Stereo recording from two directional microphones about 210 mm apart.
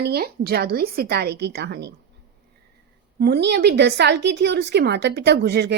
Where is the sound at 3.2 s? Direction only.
50° right (ahead or behind).